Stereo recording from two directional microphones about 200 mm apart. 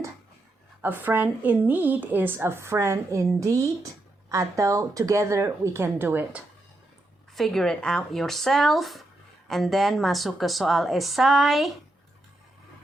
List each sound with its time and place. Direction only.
0.8 s a woman's voice: 10° right (ahead or behind)
7.3 s a woman's voice: centre (ahead or behind)